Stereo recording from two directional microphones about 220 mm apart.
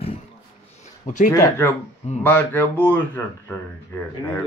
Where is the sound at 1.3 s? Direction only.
15° left (ahead or behind).